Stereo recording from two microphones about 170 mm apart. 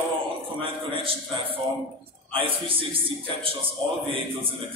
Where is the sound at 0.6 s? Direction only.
30° right (ahead or behind).